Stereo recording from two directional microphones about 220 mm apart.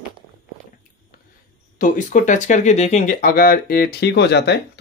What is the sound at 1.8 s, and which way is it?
Speech, 35° left (ahead or behind).